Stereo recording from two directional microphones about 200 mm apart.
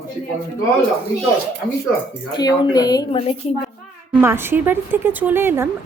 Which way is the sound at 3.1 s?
30° left (ahead or behind).